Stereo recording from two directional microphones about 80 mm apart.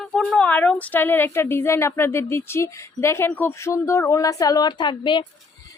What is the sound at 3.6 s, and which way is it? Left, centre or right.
Speech, left.